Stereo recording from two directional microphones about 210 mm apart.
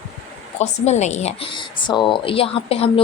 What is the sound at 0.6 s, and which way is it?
Speech, 30° left (ahead or behind).